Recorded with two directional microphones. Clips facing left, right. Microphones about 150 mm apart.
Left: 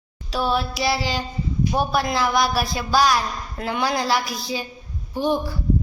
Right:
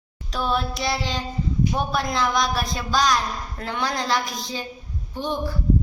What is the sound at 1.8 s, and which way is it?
A woman's voice, 5° left (ahead or behind).